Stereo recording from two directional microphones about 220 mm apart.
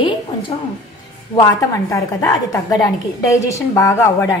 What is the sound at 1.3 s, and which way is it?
A woman's voice, 15° left (ahead or behind).